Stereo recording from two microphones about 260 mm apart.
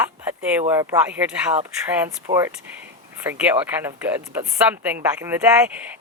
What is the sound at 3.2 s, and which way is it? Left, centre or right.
Speech, centre.